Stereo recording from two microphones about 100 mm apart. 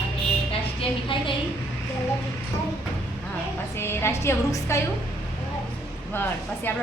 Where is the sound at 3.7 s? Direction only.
25° left (ahead or behind).